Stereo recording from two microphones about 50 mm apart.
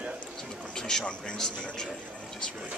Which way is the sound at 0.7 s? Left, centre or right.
Centre.